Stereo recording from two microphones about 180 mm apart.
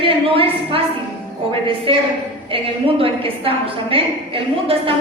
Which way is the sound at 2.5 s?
30° right (ahead or behind).